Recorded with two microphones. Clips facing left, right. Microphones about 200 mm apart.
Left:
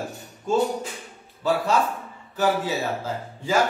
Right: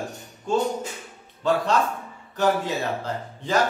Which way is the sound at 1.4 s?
5° left (ahead or behind).